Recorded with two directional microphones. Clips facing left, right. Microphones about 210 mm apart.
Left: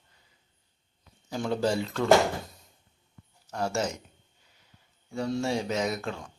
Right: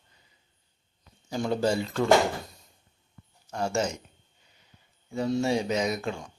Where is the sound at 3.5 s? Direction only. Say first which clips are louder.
Right 1 dB; centre (ahead or behind).